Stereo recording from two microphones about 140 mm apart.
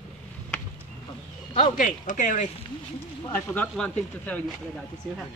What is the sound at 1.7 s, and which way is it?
Speech, 65° left (ahead or behind).